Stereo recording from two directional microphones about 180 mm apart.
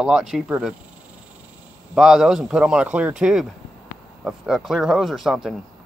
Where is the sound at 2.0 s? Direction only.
5° right (ahead or behind).